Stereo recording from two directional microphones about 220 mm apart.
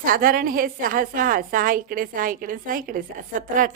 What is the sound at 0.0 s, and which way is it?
A woman's voice, 40° right (ahead or behind).